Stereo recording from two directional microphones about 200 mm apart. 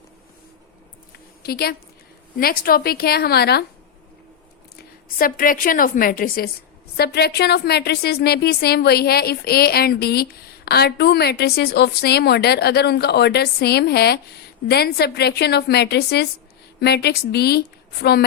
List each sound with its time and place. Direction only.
1.5 s a woman's voice: 50° left (ahead or behind)
4.8 s a woman's voice: 45° left (ahead or behind)